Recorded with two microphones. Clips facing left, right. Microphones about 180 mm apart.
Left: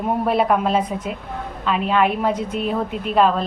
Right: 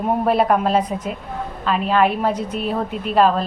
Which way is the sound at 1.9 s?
40° right (ahead or behind).